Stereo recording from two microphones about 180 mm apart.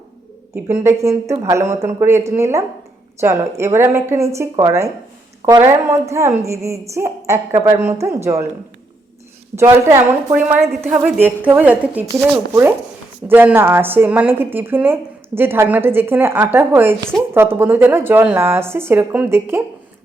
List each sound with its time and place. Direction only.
0.7 s speech: 15° right (ahead or behind)
9.8 s speech: 15° right (ahead or behind)
13.3 s speech: 10° right (ahead or behind)